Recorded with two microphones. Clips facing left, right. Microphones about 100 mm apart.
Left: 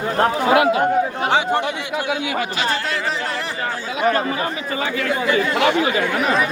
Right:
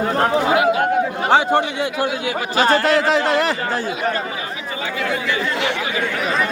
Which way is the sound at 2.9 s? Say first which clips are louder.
Right 8 dB; 85° right.